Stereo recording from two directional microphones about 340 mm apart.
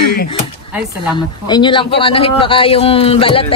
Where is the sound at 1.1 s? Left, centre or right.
Centre.